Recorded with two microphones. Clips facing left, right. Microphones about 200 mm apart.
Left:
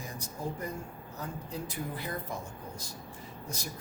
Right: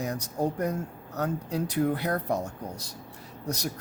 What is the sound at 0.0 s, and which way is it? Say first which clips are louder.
Speech: right 10 dB; 70° right (ahead or behind).